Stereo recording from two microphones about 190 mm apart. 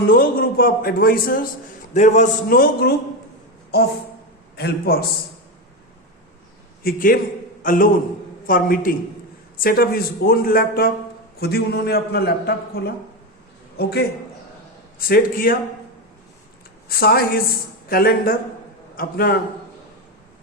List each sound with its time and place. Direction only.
0.0 s a man's voice: 50° left (ahead or behind)
1.9 s speech: 40° left (ahead or behind)
4.5 s a man's voice: 55° left (ahead or behind)
6.8 s a man's voice: 50° left (ahead or behind)
16.9 s a man's voice: 50° left (ahead or behind)